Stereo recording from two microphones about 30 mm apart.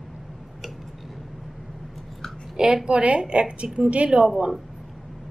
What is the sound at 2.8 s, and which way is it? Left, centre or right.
A woman's voice, right.